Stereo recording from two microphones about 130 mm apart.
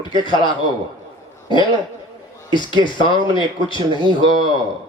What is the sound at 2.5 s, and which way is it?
A man's voice, 35° left (ahead or behind).